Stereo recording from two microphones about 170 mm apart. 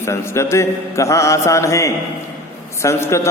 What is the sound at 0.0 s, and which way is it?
A man's voice, 15° left (ahead or behind).